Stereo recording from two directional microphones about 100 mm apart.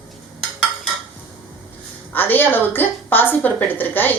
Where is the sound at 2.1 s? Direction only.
20° left (ahead or behind).